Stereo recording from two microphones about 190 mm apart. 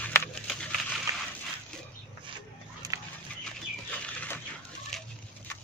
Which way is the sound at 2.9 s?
15° right (ahead or behind).